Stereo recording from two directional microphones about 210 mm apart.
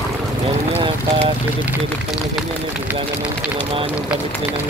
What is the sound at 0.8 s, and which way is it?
Speech, 25° right (ahead or behind).